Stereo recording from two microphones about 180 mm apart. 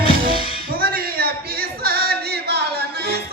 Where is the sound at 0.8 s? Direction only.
55° right (ahead or behind).